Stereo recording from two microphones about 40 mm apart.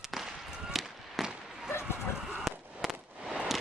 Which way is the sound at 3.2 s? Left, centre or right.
Centre.